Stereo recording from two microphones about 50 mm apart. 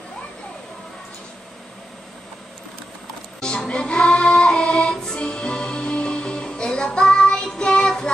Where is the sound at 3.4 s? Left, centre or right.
Centre.